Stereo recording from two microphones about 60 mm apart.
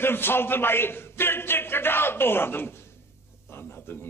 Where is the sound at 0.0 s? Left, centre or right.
Left.